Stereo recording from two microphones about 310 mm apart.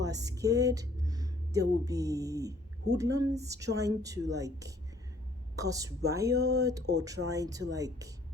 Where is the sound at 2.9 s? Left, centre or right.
Centre.